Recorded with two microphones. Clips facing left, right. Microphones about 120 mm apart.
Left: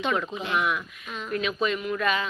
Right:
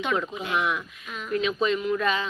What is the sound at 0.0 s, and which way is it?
Speech, 5° right (ahead or behind).